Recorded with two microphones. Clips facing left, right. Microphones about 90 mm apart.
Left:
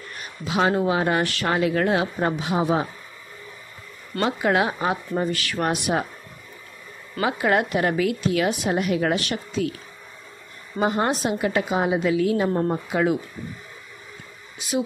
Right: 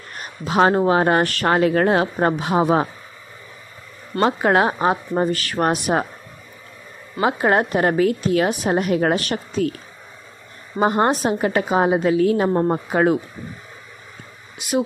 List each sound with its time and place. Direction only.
0.1 s speech: 45° right (ahead or behind)
4.1 s a woman's voice: 40° right (ahead or behind)
7.2 s a woman's voice: 35° right (ahead or behind)
10.8 s a woman's voice: 40° right (ahead or behind)